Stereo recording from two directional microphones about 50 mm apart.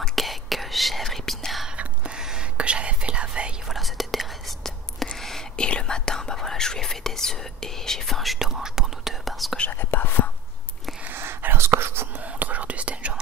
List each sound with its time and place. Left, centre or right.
0.0 s whispering: centre
1.8 s whispering: centre
3.6 s whispering: centre
5.6 s whispering: centre
9.2 s whispering: centre
9.8 s whispering: left
11.1 s whispering: right
12.2 s whispering: right